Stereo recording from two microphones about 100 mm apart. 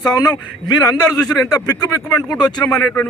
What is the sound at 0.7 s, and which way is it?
A man's voice, 40° left (ahead or behind).